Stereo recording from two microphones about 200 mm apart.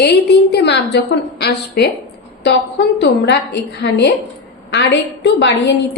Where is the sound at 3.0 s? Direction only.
60° left (ahead or behind).